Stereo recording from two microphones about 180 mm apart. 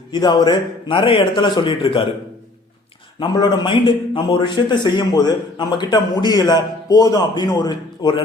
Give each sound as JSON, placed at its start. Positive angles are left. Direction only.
{"t": 0.1, "sound": "a man's voice", "side_deg": 25}
{"t": 3.2, "sound": "a man's voice", "side_deg": 25}